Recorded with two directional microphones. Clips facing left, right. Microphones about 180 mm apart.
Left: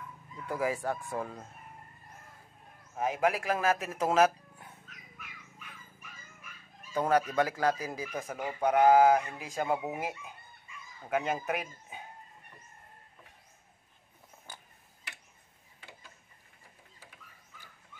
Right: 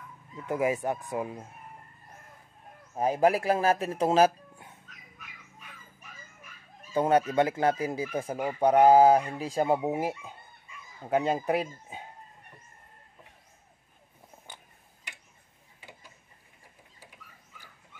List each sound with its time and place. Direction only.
0.5 s speech: 20° right (ahead or behind)
3.0 s speech: 35° right (ahead or behind)
6.9 s speech: 25° right (ahead or behind)